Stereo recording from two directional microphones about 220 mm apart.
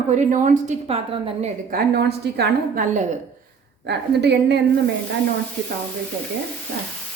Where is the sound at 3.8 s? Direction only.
50° right (ahead or behind).